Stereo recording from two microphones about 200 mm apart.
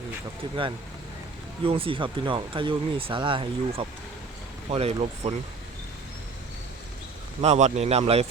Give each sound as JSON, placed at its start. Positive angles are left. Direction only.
{"t": 0.4, "sound": "speech", "side_deg": -25}
{"t": 1.6, "sound": "speech", "side_deg": -25}
{"t": 7.4, "sound": "speech", "side_deg": -35}